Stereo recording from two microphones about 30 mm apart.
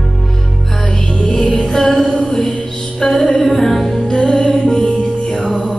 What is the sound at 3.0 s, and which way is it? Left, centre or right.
Music, left.